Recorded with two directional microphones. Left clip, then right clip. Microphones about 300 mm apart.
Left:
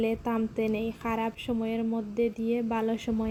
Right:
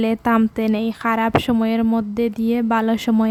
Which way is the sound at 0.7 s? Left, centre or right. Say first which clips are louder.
Right 9 dB; right.